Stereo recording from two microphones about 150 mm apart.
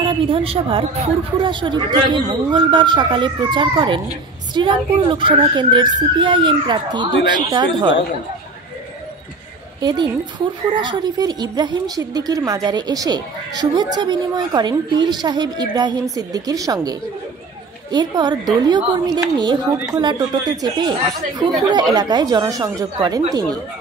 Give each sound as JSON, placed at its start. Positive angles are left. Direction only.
{"t": 0.0, "sound": "a woman's voice", "side_deg": -35}
{"t": 9.8, "sound": "a woman's voice", "side_deg": -30}
{"t": 17.9, "sound": "a woman's voice", "side_deg": -30}